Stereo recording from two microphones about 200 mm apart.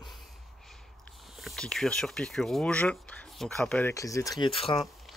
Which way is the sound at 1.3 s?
Centre (ahead or behind).